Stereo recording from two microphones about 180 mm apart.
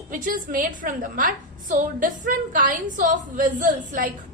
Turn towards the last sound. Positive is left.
turn(degrees=-50)  # may be behind; listen again after turning